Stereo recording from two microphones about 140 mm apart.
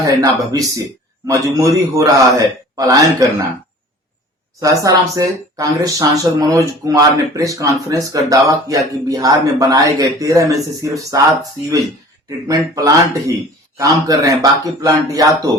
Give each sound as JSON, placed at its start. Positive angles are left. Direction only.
{"t": 0.0, "sound": "speech", "side_deg": -25}
{"t": 4.6, "sound": "speech", "side_deg": -25}
{"t": 12.5, "sound": "speech", "side_deg": -25}